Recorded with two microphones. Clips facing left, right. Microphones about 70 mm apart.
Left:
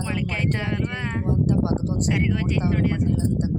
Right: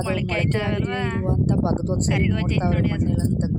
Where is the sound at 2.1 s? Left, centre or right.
Centre.